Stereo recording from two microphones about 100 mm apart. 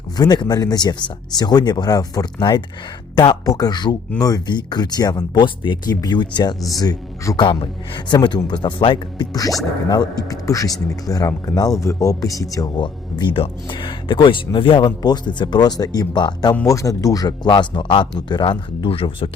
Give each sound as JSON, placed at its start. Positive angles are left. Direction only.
{"t": 0.2, "sound": "speech", "side_deg": 45}
{"t": 7.6, "sound": "speech", "side_deg": 55}
{"t": 9.9, "sound": "speech", "side_deg": 40}
{"t": 16.6, "sound": "speech", "side_deg": 35}